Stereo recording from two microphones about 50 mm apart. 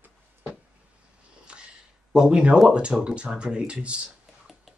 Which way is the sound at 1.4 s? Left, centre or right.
Centre.